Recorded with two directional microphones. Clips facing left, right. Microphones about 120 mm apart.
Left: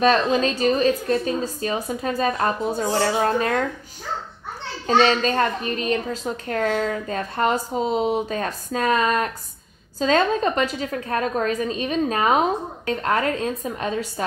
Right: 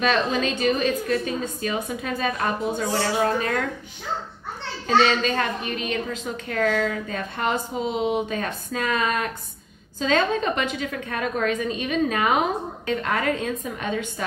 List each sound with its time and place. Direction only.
0.0 s a woman's voice: 40° left (ahead or behind)
4.8 s a woman's voice: 40° left (ahead or behind)